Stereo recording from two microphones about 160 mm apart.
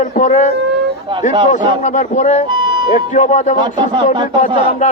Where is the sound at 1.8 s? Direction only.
50° left (ahead or behind).